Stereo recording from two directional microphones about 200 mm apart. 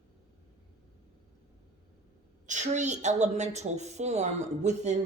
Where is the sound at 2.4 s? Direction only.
35° right (ahead or behind).